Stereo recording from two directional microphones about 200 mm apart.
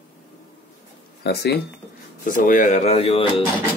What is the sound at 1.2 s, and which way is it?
Speech, 55° left (ahead or behind).